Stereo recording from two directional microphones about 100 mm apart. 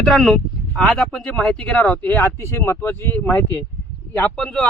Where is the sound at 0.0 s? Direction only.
Centre (ahead or behind).